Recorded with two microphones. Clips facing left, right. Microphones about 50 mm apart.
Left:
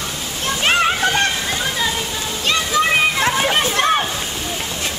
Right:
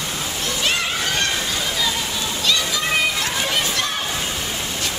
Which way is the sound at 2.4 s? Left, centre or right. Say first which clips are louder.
Left 5 dB; left.